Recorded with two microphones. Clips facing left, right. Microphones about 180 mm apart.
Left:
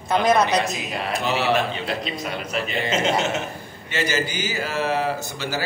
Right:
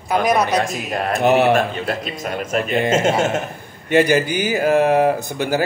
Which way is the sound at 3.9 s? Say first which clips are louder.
Right 10 dB; 55° right (ahead or behind).